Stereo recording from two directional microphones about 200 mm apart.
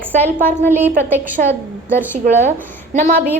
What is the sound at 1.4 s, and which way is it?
Speech, 40° right (ahead or behind).